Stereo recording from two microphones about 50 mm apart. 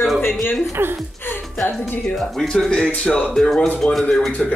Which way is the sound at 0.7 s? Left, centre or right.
Right.